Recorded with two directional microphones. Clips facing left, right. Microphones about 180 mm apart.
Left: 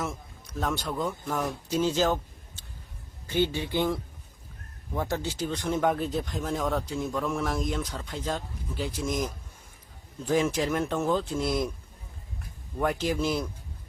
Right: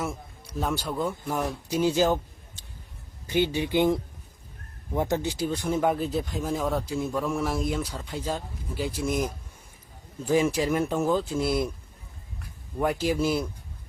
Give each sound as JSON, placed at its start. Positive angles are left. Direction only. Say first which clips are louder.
{"t": 0.0, "sound": "speech", "louder": "right 2 dB", "side_deg": -10}
{"t": 12.8, "sound": "speech", "louder": "right 2 dB", "side_deg": -5}